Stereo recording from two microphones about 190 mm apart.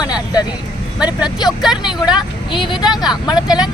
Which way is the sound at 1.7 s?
20° left (ahead or behind).